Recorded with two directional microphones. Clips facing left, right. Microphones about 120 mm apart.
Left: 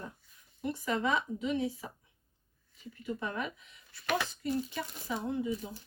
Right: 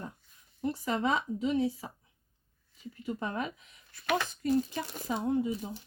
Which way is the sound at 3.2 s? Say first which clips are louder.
Right 3 dB; 35° right (ahead or behind).